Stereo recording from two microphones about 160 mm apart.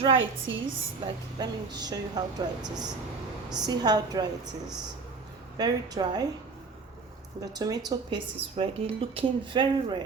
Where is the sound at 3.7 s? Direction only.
25° right (ahead or behind).